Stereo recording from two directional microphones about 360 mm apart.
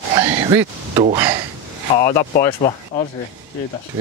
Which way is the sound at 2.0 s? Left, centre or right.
Centre.